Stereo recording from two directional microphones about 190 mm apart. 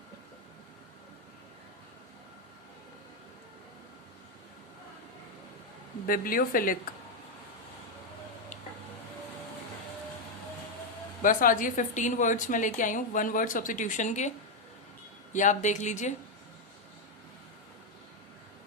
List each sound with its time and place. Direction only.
6.1 s a woman's voice: 50° left (ahead or behind)
11.2 s a woman's voice: 45° left (ahead or behind)